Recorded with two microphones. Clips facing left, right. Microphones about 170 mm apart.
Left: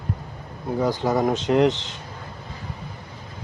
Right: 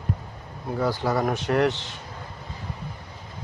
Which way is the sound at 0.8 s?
20° left (ahead or behind).